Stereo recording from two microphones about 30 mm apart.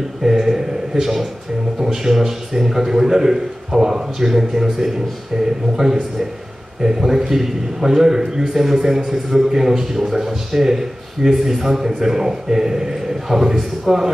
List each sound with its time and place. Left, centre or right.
0.2 s a man's voice: centre
6.8 s a man's voice: centre